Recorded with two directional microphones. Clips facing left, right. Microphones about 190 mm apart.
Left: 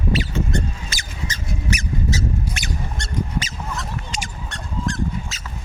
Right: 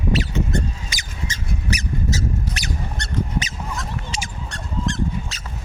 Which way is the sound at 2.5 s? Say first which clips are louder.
Even; 10° left (ahead or behind).